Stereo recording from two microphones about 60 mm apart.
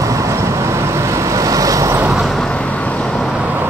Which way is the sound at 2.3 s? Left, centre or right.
Centre.